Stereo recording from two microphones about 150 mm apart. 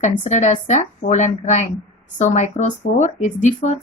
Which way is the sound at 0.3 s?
55° left (ahead or behind).